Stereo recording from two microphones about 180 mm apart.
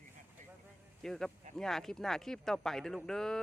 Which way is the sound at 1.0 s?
Centre (ahead or behind).